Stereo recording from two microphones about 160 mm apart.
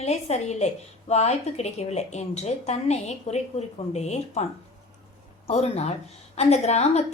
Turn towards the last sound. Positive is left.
turn(degrees=45)  # may be behind; listen again after turning